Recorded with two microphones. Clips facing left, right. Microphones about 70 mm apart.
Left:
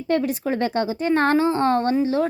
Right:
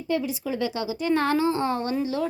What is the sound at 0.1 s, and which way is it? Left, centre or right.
A woman's voice, left.